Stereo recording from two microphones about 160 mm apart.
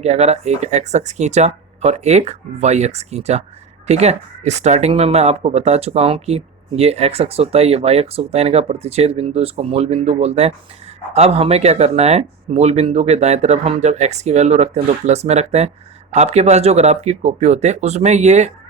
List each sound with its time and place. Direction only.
0.0 s speech: 40° right (ahead or behind)